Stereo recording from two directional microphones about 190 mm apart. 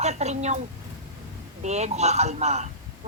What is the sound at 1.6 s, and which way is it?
Speech, 35° right (ahead or behind).